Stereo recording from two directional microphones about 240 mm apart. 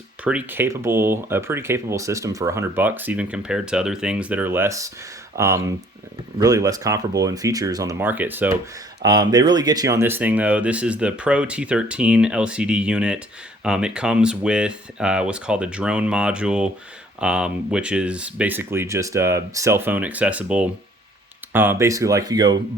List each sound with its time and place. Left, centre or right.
0.3 s speech: centre